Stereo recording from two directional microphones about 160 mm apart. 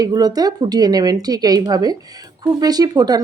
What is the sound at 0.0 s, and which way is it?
A woman's voice, 25° right (ahead or behind).